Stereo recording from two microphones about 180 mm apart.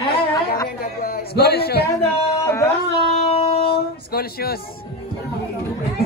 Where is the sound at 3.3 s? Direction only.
35° left (ahead or behind).